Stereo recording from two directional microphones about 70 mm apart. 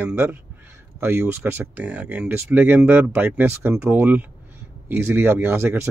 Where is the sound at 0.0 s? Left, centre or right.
Right.